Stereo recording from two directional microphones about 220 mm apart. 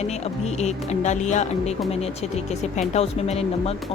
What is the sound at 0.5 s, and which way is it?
Speech, 30° left (ahead or behind).